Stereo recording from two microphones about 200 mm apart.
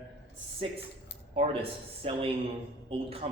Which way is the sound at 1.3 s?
30° right (ahead or behind).